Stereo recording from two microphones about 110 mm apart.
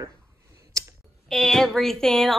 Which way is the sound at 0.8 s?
35° right (ahead or behind).